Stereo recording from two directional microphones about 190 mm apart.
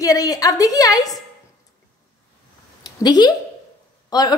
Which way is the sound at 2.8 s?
20° left (ahead or behind).